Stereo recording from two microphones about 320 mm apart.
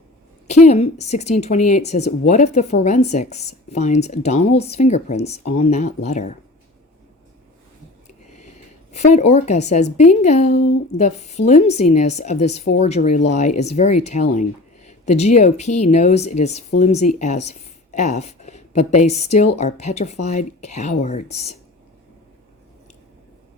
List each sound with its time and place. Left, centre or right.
0.6 s a woman's voice: left
8.0 s a sound: left
8.9 s a woman's voice: left